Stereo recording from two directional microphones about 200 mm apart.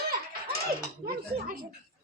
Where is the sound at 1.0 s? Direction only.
50° right (ahead or behind).